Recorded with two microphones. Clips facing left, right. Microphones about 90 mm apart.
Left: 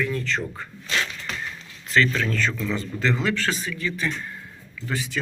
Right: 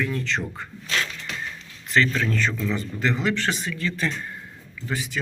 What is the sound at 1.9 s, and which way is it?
Speech, 25° right (ahead or behind).